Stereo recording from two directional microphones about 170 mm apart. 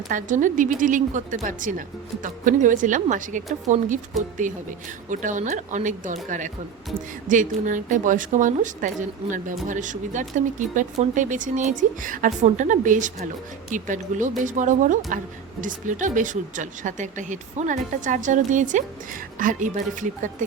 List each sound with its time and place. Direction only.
0.1 s speech: 50° right (ahead or behind)